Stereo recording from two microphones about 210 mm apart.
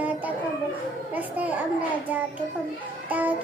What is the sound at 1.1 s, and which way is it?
Children playing, 10° right (ahead or behind).